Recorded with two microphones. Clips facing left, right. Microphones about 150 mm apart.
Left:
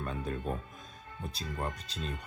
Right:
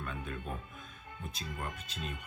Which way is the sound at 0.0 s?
35° left (ahead or behind).